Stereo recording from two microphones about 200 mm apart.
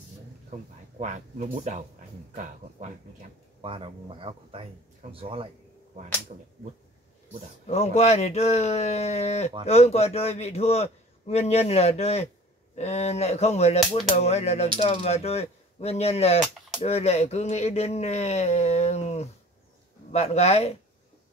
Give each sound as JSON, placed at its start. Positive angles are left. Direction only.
{"t": 0.5, "sound": "speech", "side_deg": -35}
{"t": 7.6, "sound": "a man's voice", "side_deg": 30}